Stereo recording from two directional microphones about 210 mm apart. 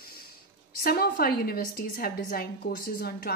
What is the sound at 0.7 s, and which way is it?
A woman's voice, 45° left (ahead or behind).